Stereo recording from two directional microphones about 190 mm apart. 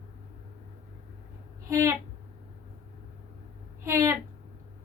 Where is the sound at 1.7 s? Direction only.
15° right (ahead or behind).